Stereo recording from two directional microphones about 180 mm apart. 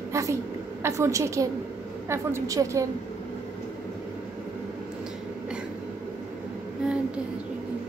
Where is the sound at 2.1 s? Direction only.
15° right (ahead or behind).